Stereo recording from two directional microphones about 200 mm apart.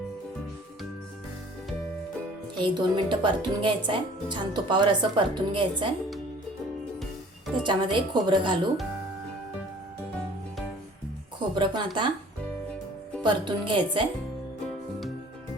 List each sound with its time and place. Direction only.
2.6 s speech: 25° right (ahead or behind)
7.5 s speech: 25° right (ahead or behind)
11.3 s speech: 25° right (ahead or behind)
13.2 s speech: 25° right (ahead or behind)